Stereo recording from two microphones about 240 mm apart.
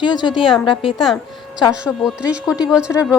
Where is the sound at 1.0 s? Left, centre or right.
Centre.